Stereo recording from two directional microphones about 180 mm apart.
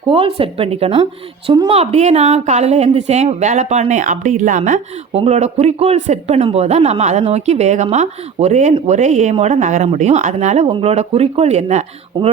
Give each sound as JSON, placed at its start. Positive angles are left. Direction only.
{"t": 0.1, "sound": "a woman's voice", "side_deg": -30}